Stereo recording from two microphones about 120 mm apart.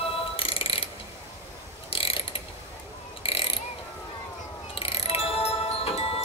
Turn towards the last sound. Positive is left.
turn(degrees=55)  # may be behind; listen again after turning